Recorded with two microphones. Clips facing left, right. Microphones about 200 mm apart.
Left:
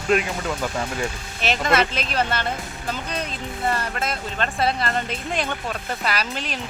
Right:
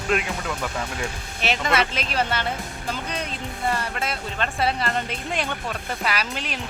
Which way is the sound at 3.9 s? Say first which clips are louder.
Left 1 dB; 10° right (ahead or behind).